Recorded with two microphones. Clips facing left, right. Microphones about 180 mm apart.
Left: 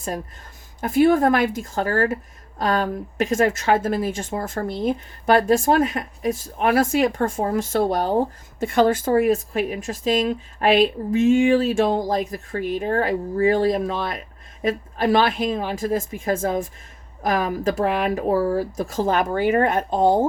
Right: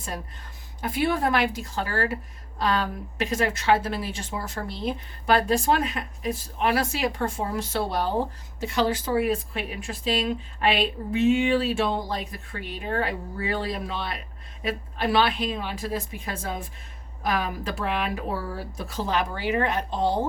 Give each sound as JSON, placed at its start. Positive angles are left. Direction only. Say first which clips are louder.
{"t": 0.8, "sound": "speech", "louder": "left 8 dB", "side_deg": 45}